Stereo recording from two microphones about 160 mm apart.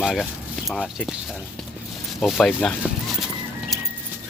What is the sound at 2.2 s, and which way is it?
Speech, 5° left (ahead or behind).